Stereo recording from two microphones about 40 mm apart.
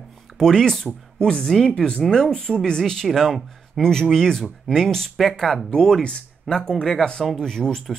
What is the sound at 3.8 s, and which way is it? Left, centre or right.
Speech, centre.